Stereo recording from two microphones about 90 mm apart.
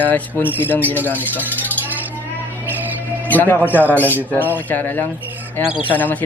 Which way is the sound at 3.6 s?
20° right (ahead or behind).